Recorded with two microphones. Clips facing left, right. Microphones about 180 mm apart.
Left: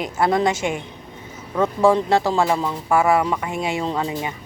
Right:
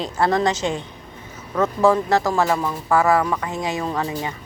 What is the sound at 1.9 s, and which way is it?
Speech, 25° left (ahead or behind).